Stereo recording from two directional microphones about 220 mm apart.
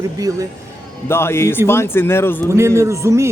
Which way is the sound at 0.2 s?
15° right (ahead or behind).